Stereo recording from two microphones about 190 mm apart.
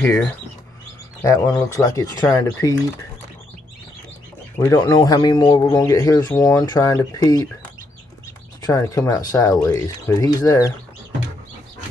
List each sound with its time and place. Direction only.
0.0 s speech: 10° left (ahead or behind)
4.6 s a man's voice: 20° left (ahead or behind)
8.6 s a man's voice: 20° left (ahead or behind)